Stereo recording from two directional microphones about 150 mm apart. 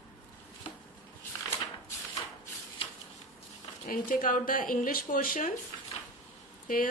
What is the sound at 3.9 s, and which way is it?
A woman's voice, 65° left (ahead or behind).